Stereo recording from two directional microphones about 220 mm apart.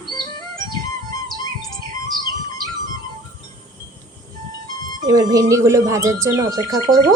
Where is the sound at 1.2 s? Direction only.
15° left (ahead or behind).